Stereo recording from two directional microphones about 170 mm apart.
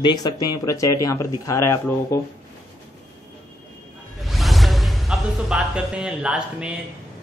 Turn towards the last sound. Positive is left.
turn(degrees=-5)  # may be behind; listen again after turning